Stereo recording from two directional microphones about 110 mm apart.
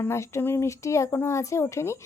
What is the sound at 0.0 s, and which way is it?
Speech, 25° left (ahead or behind).